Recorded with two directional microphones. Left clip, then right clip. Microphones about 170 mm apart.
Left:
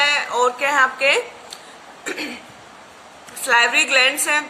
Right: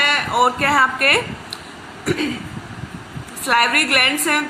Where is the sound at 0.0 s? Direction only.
50° left (ahead or behind).